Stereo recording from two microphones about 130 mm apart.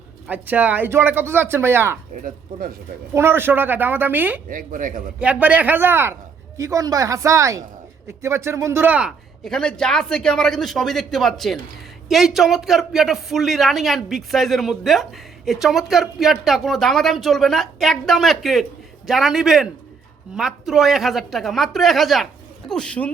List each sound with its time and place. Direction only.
0.3 s speech: 10° right (ahead or behind)
2.2 s speech: 90° right
3.2 s speech: 15° right (ahead or behind)
4.4 s speech: 90° right
5.2 s speech: 10° right (ahead or behind)
9.4 s speech: 5° left (ahead or behind)